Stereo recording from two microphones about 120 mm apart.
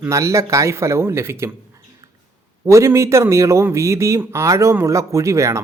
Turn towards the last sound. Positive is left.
turn(degrees=-25)  # may be behind; listen again after turning